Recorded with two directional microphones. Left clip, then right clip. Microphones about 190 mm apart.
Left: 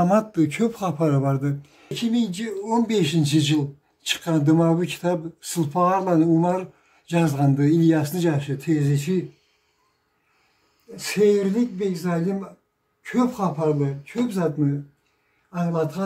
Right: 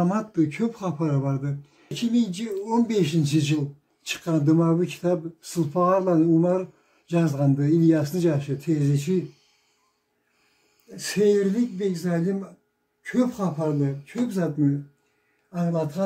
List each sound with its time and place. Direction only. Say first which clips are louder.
0.0 s speech: left 5 dB; 55° left (ahead or behind)
1.9 s speech: left 1 dB; 20° left (ahead or behind)
11.0 s speech: left 2 dB; 10° left (ahead or behind)